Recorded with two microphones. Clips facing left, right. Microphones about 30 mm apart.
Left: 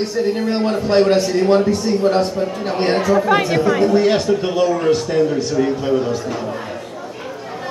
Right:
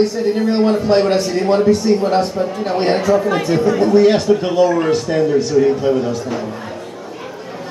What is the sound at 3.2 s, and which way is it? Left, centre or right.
Speech, left.